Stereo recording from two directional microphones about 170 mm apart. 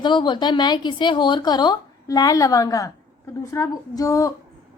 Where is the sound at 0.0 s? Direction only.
25° left (ahead or behind).